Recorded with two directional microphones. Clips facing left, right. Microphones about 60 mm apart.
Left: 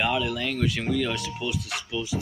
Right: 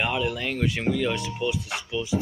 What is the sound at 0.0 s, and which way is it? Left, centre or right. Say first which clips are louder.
Speech: even; centre.